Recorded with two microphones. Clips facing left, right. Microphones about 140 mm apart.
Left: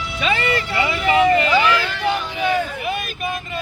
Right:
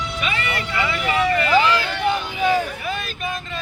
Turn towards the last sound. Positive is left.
turn(degrees=10)  # may be behind; listen again after turning